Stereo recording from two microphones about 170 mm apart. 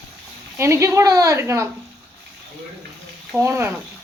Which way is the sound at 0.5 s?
15° right (ahead or behind).